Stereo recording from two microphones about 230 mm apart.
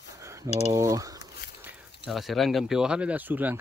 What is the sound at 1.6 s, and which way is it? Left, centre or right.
Speech, centre.